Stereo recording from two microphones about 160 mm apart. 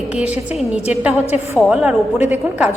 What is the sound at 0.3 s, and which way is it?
Speech, 40° left (ahead or behind).